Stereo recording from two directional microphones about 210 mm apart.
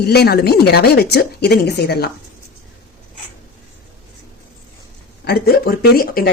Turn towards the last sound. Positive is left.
turn(degrees=45)  # may be behind; listen again after turning